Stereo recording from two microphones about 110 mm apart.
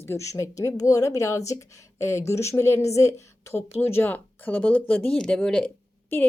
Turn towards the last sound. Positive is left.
turn(degrees=15)  # may be behind; listen again after turning